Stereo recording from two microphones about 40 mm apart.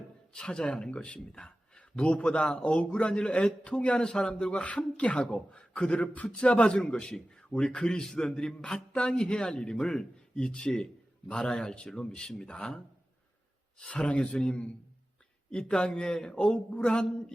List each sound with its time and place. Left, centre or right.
0.3 s a man's voice: left
1.4 s a sound: centre
1.8 s a man's voice: left